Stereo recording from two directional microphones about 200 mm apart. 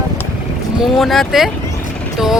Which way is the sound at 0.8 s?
Centre (ahead or behind).